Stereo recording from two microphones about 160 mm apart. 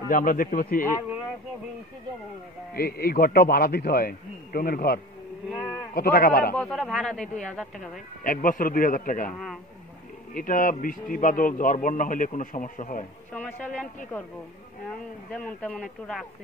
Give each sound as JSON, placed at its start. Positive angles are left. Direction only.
{"t": 0.1, "sound": "a man's voice", "side_deg": 60}
{"t": 2.7, "sound": "a man's voice", "side_deg": 70}
{"t": 6.5, "sound": "speech", "side_deg": 5}
{"t": 8.2, "sound": "a man's voice", "side_deg": 60}
{"t": 10.3, "sound": "a man's voice", "side_deg": 60}
{"t": 13.3, "sound": "speech", "side_deg": 10}
{"t": 15.3, "sound": "speech", "side_deg": 5}